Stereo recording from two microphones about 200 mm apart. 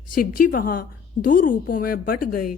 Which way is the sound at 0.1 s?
45° left (ahead or behind).